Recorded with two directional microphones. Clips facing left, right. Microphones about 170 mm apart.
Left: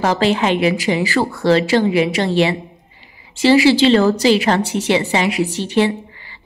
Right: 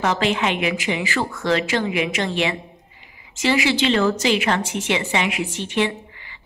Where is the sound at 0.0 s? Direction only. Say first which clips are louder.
Left 5 dB; 35° left (ahead or behind).